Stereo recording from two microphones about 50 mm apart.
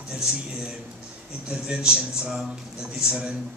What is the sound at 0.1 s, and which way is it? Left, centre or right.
A man's voice, centre.